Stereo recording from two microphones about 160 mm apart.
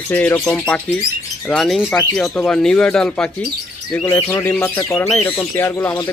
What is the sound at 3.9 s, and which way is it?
Speech, 15° left (ahead or behind).